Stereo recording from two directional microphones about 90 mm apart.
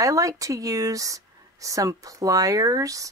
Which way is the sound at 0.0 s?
40° right (ahead or behind).